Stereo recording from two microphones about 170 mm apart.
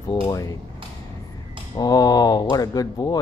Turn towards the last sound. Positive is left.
turn(degrees=20)  # may be behind; listen again after turning